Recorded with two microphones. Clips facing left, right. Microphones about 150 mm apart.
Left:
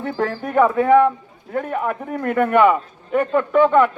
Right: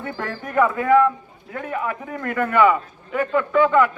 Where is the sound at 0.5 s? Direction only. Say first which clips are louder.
Left 3 dB; 30° left (ahead or behind).